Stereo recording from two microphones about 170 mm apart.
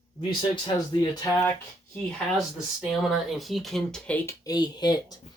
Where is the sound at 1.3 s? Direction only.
10° left (ahead or behind).